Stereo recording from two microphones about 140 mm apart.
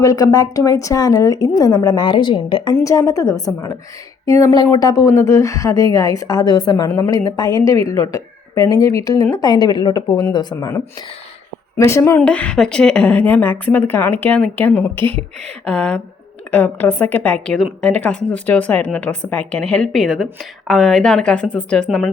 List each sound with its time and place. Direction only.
0.0 s speech: 25° left (ahead or behind)
2.8 s a woman's voice: 25° left (ahead or behind)
12.2 s a woman's voice: 10° left (ahead or behind)